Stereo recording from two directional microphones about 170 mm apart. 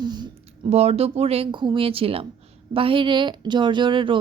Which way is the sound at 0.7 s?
35° right (ahead or behind).